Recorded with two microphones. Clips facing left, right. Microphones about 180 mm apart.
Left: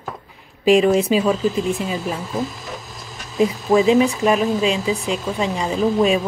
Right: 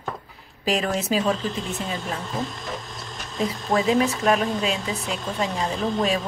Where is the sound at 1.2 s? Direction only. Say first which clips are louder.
Left 6 dB; 5° left (ahead or behind).